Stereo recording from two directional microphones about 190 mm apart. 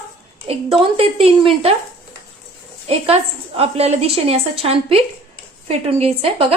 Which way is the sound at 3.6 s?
35° right (ahead or behind).